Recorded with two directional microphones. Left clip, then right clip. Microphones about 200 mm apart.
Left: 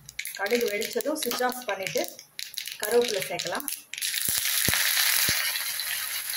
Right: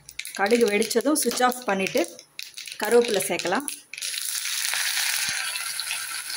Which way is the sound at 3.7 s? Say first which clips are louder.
Left 1 dB; 10° left (ahead or behind).